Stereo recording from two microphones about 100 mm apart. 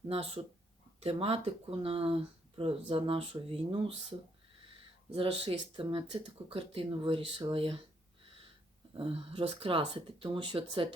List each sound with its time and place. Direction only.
0.9 s speech: 70° right (ahead or behind)
5.1 s speech: 60° right (ahead or behind)
9.0 s speech: 65° right (ahead or behind)